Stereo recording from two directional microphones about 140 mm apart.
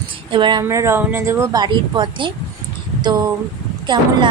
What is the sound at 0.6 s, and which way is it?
Speech, 20° right (ahead or behind).